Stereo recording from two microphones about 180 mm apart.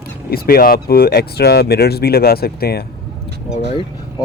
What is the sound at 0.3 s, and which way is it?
Speech, 55° left (ahead or behind).